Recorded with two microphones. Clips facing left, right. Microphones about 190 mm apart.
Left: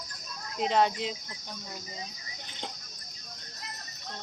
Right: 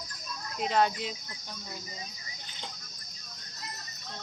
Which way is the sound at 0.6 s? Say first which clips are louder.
Left 1 dB; 25° left (ahead or behind).